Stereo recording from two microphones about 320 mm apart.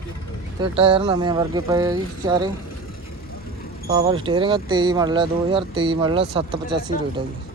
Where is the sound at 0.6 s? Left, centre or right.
Centre.